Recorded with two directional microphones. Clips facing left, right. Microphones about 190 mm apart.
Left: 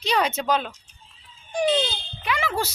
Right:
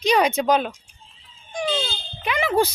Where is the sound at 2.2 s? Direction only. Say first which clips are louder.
Right 6 dB; 20° right (ahead or behind).